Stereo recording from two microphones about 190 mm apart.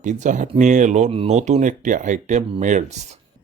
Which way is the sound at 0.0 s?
40° right (ahead or behind).